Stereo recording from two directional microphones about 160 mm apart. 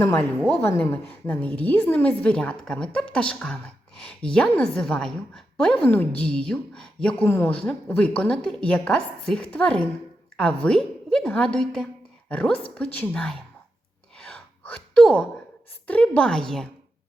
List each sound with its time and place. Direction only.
0.0 s a woman's voice: 15° left (ahead or behind)
14.2 s gasp: 5° left (ahead or behind)
15.9 s a woman's voice: 10° left (ahead or behind)